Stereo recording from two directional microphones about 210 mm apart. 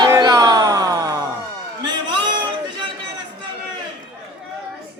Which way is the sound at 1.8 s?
20° right (ahead or behind).